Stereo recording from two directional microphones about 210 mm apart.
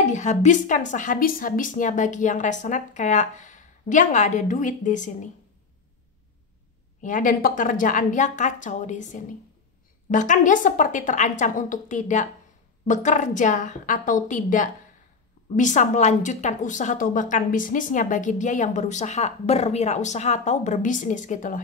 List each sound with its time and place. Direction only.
0.0 s a woman's voice: 35° left (ahead or behind)
7.0 s a woman's voice: 40° left (ahead or behind)